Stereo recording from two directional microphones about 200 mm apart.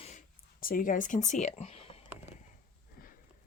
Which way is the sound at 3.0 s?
45° left (ahead or behind).